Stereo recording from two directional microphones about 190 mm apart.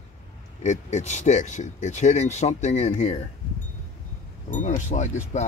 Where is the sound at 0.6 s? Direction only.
40° left (ahead or behind).